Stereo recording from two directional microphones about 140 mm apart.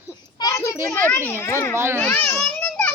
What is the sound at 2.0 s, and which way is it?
Speech, 15° left (ahead or behind).